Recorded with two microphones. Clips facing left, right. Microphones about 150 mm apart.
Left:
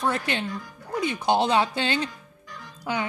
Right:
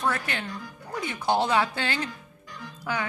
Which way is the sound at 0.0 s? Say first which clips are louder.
Left 3 dB; 20° left (ahead or behind).